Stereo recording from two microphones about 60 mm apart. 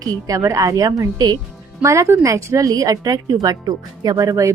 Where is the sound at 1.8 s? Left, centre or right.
Right.